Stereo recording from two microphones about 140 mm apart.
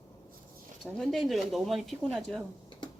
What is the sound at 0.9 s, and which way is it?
Speech, 5° left (ahead or behind).